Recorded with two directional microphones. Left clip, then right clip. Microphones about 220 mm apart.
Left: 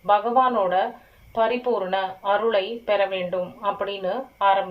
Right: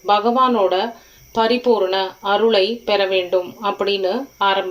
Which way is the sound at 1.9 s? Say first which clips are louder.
Right 4 dB; 45° right (ahead or behind).